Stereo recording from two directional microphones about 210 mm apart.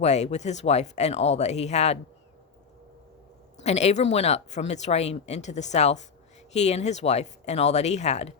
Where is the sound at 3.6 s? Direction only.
30° left (ahead or behind).